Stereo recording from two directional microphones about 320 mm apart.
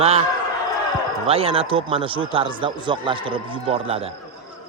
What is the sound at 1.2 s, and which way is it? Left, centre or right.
Speech, centre.